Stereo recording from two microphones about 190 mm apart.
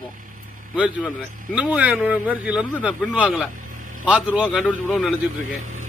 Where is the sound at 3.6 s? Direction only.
45° right (ahead or behind).